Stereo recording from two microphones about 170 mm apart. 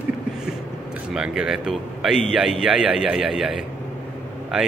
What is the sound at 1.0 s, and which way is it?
Speech, 5° right (ahead or behind).